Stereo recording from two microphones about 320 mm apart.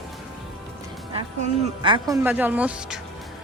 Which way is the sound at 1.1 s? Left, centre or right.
Centre.